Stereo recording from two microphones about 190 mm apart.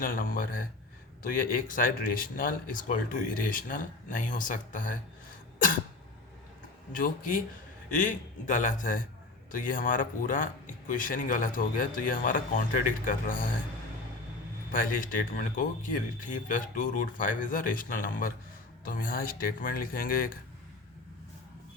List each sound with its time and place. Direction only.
0.0 s speech: 45° left (ahead or behind)
6.9 s speech: 45° left (ahead or behind)
14.7 s speech: 45° left (ahead or behind)